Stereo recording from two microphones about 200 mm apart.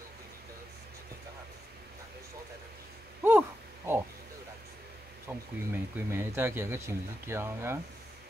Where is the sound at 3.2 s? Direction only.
10° right (ahead or behind).